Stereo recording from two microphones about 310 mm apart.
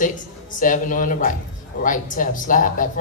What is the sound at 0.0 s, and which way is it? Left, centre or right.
Speech, left.